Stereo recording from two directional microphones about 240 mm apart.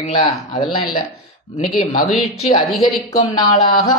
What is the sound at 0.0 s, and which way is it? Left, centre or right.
Speech, left.